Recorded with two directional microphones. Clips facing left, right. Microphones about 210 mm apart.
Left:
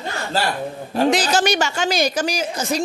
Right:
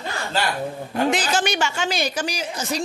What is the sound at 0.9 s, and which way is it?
A woman's voice, 35° left (ahead or behind).